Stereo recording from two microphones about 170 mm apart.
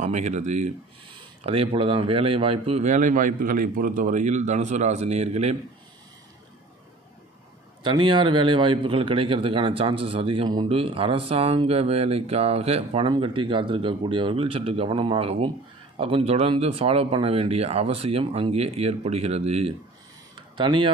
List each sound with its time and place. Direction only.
0.0 s a man's voice: 45° right (ahead or behind)
7.8 s a man's voice: 25° right (ahead or behind)